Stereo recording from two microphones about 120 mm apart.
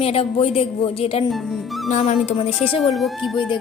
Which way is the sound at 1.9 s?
75° left (ahead or behind).